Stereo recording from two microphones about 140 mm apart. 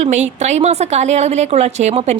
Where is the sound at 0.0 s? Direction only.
55° right (ahead or behind).